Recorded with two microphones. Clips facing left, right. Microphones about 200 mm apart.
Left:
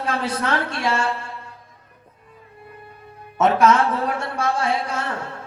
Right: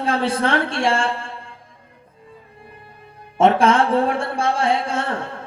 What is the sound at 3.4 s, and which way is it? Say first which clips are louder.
A woman's voice: right 2 dB; 30° right (ahead or behind).